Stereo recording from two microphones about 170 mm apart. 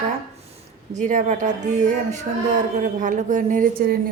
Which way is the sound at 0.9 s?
45° right (ahead or behind).